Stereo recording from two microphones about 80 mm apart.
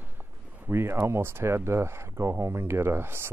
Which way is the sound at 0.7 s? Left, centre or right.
Right.